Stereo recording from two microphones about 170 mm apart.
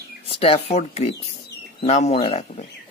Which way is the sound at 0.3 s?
35° left (ahead or behind).